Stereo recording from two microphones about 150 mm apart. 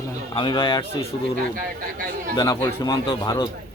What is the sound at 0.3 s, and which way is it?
Speech, 35° left (ahead or behind).